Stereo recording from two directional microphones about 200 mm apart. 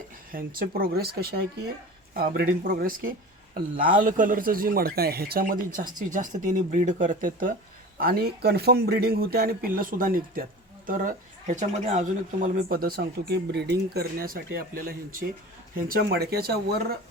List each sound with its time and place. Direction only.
0.3 s speech: 45° right (ahead or behind)